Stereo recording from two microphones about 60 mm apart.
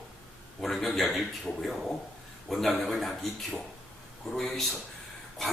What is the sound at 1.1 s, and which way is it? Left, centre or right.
Speech, centre.